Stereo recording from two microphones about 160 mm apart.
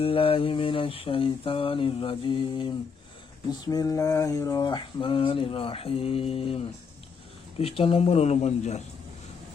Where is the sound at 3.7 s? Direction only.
20° left (ahead or behind); by 8.8 s 45° left (ahead or behind).